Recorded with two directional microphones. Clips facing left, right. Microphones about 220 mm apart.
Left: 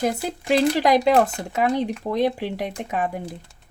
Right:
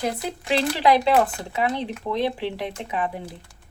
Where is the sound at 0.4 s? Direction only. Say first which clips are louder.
Left 2 dB; 45° left (ahead or behind).